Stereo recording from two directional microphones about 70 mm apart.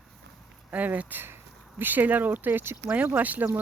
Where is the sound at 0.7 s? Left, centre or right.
Right.